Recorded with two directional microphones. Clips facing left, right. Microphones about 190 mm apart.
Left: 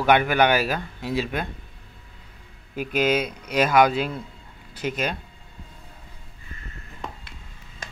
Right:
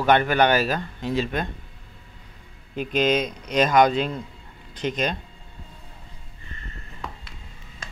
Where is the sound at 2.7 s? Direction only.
10° left (ahead or behind).